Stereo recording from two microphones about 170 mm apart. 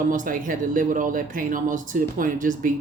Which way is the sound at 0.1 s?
50° right (ahead or behind).